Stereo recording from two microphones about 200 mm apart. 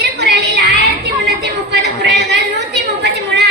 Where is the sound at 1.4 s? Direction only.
60° right (ahead or behind).